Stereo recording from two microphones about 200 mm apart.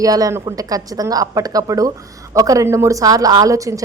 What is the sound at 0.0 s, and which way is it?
A woman's voice, 15° right (ahead or behind).